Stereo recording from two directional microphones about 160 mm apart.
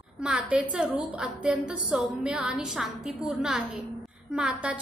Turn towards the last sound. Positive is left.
turn(degrees=-5)  # may be behind; listen again after turning